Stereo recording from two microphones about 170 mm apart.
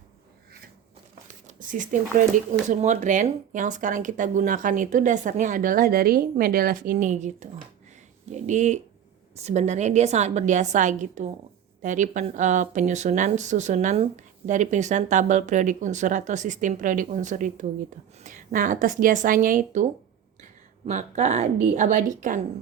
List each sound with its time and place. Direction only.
1.5 s a woman's voice: 50° right (ahead or behind)